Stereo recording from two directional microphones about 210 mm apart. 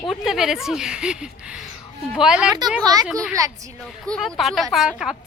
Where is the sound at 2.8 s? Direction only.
15° right (ahead or behind).